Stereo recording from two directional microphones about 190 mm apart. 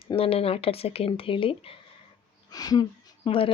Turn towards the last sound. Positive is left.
turn(degrees=25)  # may be behind; listen again after turning